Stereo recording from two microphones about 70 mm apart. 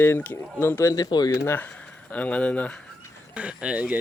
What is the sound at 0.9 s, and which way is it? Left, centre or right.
Speech, left.